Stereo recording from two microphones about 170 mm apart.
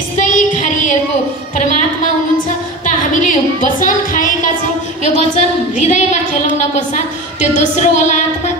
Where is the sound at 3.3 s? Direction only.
50° left (ahead or behind).